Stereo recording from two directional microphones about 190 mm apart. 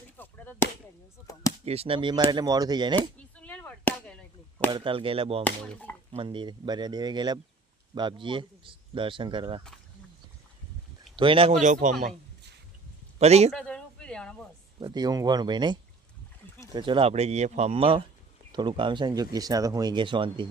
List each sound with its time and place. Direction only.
0.2 s chop: 10° left (ahead or behind)
1.6 s speech: 30° right (ahead or behind)
3.3 s chop: 10° left (ahead or behind)
4.7 s speech: 25° right (ahead or behind)
5.4 s speech: 10° left (ahead or behind)
6.1 s speech: 25° right (ahead or behind)
11.2 s speech: 30° right (ahead or behind)
13.1 s a man's voice: 35° right (ahead or behind)
13.5 s a sound: 5° left (ahead or behind)
14.8 s speech: 20° right (ahead or behind)